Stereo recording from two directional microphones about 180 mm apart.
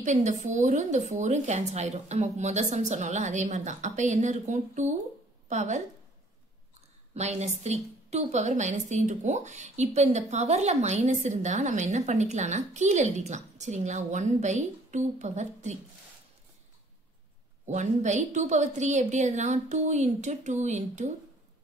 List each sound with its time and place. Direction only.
0.0 s a woman's voice: 40° right (ahead or behind)
7.2 s a woman's voice: 40° right (ahead or behind)
17.6 s a woman's voice: 40° right (ahead or behind)